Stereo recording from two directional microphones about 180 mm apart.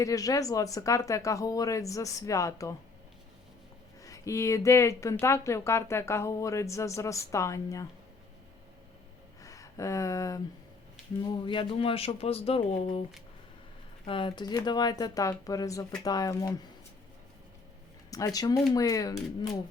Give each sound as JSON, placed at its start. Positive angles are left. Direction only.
{"t": 0.0, "sound": "speech", "side_deg": 20}
{"t": 4.0, "sound": "speech", "side_deg": 15}
{"t": 9.4, "sound": "a sound", "side_deg": 20}
{"t": 11.2, "sound": "speech", "side_deg": 25}
{"t": 14.0, "sound": "speech", "side_deg": 30}
{"t": 18.1, "sound": "speech", "side_deg": 20}